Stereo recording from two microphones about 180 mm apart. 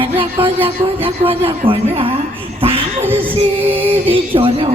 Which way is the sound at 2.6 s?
30° right (ahead or behind).